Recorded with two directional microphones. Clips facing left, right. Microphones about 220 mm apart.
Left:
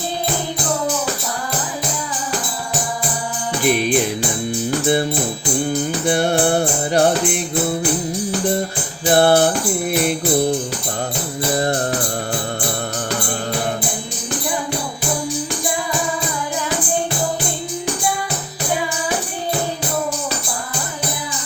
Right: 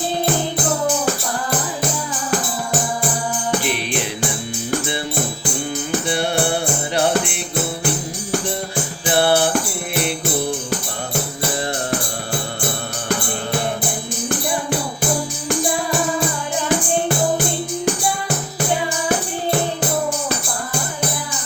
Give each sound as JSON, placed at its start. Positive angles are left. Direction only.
{"t": 3.6, "sound": "music", "side_deg": 45}
{"t": 6.1, "sound": "music", "side_deg": 45}
{"t": 9.0, "sound": "music", "side_deg": 45}